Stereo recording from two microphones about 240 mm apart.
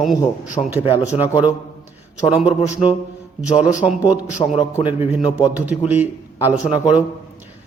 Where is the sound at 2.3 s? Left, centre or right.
Centre.